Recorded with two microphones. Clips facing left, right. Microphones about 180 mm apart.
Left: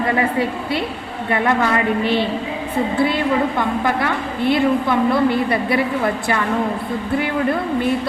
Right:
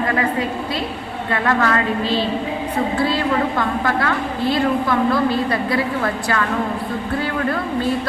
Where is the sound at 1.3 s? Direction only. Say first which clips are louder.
Left 1 dB; 20° left (ahead or behind).